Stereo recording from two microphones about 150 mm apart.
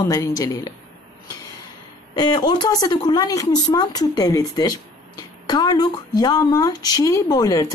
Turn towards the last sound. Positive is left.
turn(degrees=25)  # may be behind; listen again after turning